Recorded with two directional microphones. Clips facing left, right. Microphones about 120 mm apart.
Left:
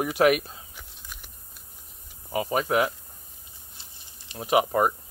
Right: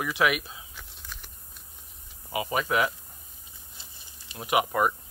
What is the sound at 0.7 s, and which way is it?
Whispering, 10° left (ahead or behind).